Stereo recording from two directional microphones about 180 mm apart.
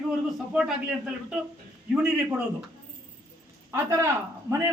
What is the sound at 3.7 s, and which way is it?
Speech, 15° right (ahead or behind).